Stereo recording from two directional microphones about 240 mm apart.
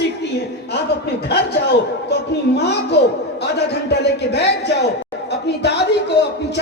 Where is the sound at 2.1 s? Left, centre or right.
Left.